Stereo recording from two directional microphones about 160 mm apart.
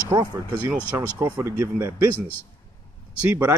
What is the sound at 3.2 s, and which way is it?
Speech, 10° right (ahead or behind).